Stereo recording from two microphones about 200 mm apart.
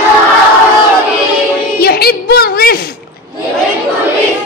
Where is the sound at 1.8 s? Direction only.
50° left (ahead or behind).